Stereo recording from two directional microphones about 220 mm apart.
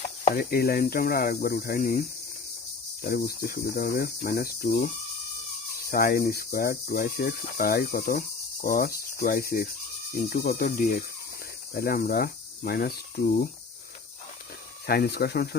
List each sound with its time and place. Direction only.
0.3 s speech: 45° left (ahead or behind)
5.9 s speech: 40° left (ahead or behind)
14.8 s speech: 45° left (ahead or behind)